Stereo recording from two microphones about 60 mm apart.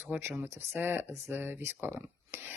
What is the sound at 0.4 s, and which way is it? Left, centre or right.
Speech, right.